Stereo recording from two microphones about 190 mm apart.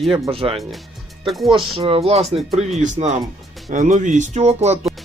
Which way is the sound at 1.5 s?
30° right (ahead or behind).